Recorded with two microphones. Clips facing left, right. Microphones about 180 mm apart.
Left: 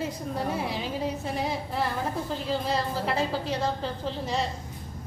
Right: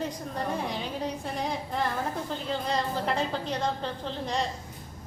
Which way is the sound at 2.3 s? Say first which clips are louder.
Left 2 dB; centre (ahead or behind).